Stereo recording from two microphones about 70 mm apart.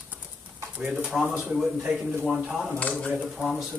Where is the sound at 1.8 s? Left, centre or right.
Centre.